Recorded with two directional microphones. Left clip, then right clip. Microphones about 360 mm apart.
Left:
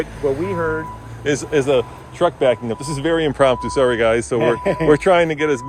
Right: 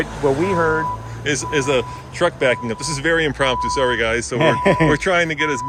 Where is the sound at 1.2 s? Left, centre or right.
Centre.